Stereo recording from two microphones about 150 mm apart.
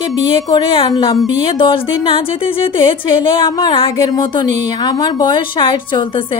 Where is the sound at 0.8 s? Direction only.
30° left (ahead or behind).